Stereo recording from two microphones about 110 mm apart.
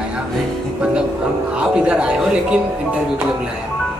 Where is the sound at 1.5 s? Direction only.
10° right (ahead or behind).